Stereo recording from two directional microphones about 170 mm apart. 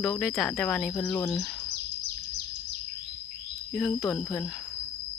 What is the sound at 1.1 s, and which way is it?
Speech, 20° left (ahead or behind).